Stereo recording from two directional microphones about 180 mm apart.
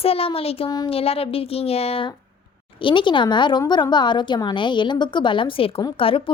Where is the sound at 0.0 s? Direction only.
30° left (ahead or behind).